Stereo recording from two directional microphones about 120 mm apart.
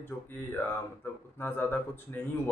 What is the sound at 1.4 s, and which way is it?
Speech, 20° left (ahead or behind).